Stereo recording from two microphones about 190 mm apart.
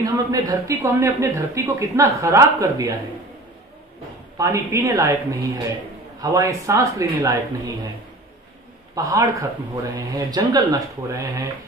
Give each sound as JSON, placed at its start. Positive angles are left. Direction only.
{"t": 0.0, "sound": "speech", "side_deg": -20}
{"t": 4.4, "sound": "speech", "side_deg": -15}
{"t": 8.9, "sound": "speech", "side_deg": -15}